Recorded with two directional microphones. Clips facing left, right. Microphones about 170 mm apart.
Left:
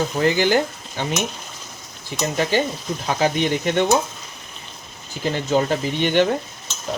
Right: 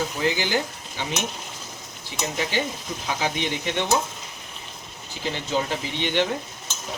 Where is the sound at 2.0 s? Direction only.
50° left (ahead or behind).